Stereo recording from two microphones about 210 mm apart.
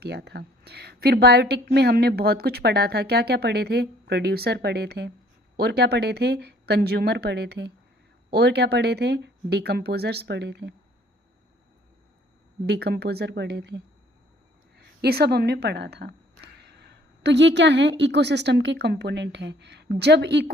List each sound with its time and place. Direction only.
0.0 s speech: 50° right (ahead or behind)
12.6 s speech: 50° right (ahead or behind)
15.0 s a woman's voice: 50° right (ahead or behind)